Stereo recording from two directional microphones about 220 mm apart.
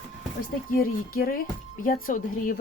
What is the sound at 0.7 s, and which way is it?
Speech, 40° left (ahead or behind).